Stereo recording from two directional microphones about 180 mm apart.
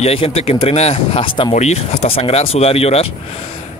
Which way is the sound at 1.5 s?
40° left (ahead or behind).